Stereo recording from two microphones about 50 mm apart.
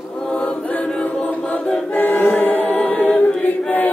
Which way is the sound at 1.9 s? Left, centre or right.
Left.